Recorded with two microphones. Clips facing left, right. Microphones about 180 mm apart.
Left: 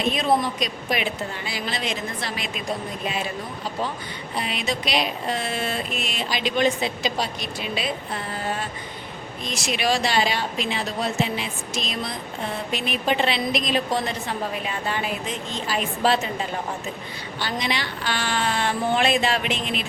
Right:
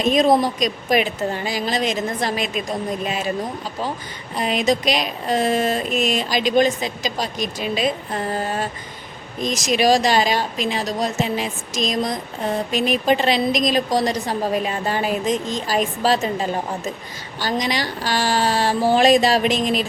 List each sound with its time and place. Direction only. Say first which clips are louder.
0.0 s a woman's voice: right 6 dB; 40° right (ahead or behind)
4.4 s a woman's voice: right 8 dB; 45° right (ahead or behind)
5.3 s a sound: right 8 dB; 40° right (ahead or behind)